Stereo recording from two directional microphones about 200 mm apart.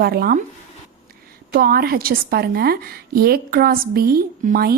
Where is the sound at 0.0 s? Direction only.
50° right (ahead or behind).